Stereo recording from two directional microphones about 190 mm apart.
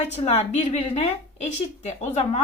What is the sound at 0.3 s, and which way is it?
Speech, 35° left (ahead or behind).